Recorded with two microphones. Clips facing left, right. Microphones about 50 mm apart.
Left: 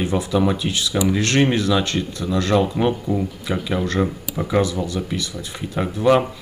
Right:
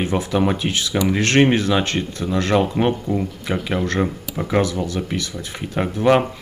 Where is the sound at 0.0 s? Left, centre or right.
Right.